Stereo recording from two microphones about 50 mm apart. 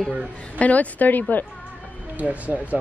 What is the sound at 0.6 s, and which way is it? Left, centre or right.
Speech, left.